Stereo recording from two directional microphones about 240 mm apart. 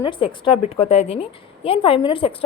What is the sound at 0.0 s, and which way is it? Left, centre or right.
A woman's voice, centre.